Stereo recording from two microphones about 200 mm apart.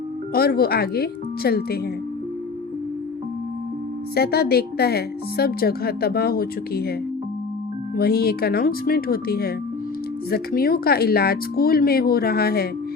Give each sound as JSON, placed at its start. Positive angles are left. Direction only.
{"t": 0.3, "sound": "speech", "side_deg": 50}
{"t": 4.1, "sound": "speech", "side_deg": 50}
{"t": 7.9, "sound": "speech", "side_deg": 50}